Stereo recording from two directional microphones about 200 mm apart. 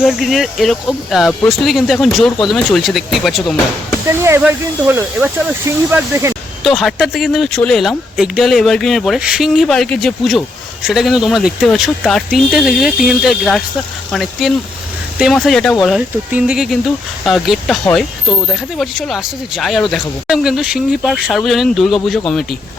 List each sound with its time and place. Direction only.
0.0 s speech: centre (ahead or behind)
4.0 s speech: 15° right (ahead or behind)
6.7 s speech: centre (ahead or behind)